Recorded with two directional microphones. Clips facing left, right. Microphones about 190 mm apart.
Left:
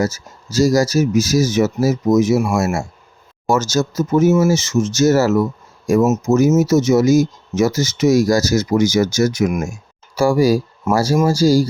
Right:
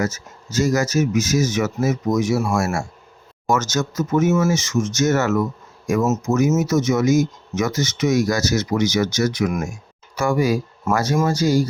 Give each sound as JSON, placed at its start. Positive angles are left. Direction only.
{"t": 0.0, "sound": "speech", "side_deg": 35}
{"t": 6.0, "sound": "speech", "side_deg": 20}